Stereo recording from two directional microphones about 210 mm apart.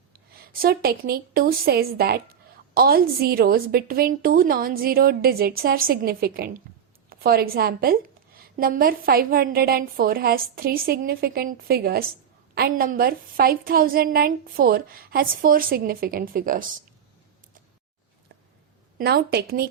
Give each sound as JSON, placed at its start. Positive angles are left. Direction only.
{"t": 0.6, "sound": "speech", "side_deg": -45}
{"t": 18.9, "sound": "speech", "side_deg": -50}